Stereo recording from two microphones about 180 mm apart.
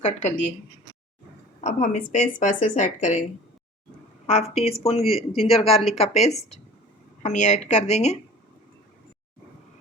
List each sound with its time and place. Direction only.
0.0 s speech: 40° left (ahead or behind)
1.6 s speech: 45° left (ahead or behind)
4.3 s speech: 35° left (ahead or behind)